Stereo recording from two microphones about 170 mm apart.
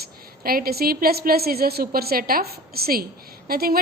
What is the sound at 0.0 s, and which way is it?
A woman's voice, 60° right (ahead or behind).